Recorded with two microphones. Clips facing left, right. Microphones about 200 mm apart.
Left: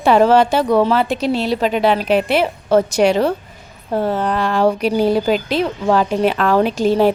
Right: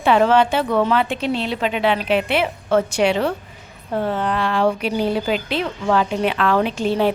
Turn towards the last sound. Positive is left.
turn(degrees=40)  # may be behind; listen again after turning